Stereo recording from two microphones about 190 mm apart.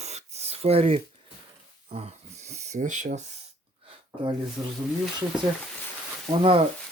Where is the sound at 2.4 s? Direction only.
35° right (ahead or behind).